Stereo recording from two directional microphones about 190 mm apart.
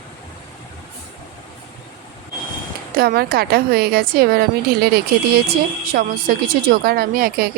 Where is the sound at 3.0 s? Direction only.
55° right (ahead or behind).